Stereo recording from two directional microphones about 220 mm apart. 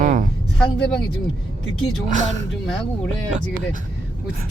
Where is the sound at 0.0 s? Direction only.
35° right (ahead or behind).